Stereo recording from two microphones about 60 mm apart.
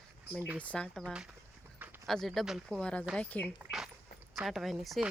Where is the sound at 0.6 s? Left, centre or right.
Left.